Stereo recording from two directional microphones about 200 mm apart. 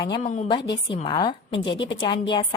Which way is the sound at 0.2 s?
35° left (ahead or behind).